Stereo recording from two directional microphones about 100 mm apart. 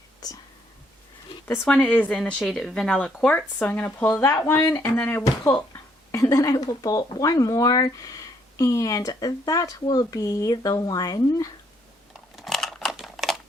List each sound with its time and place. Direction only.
0.2 s speech: 40° left (ahead or behind)
1.6 s speech: 10° left (ahead or behind)
4.1 s speech: 30° left (ahead or behind)
6.1 s speech: 35° left (ahead or behind)
12.4 s typewriter: centre (ahead or behind)